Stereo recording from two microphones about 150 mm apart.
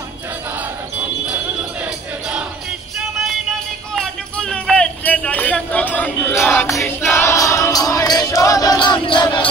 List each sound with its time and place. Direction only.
3.9 s music: 5° left (ahead or behind); by 9.5 s 30° left (ahead or behind)